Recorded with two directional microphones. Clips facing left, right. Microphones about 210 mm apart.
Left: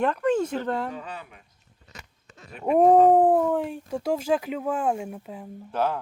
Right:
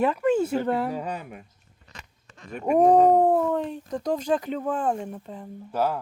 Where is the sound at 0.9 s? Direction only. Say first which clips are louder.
Right 6 dB; 40° right (ahead or behind).